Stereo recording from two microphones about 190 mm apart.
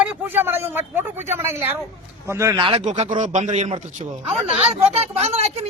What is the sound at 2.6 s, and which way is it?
Speech, 30° right (ahead or behind).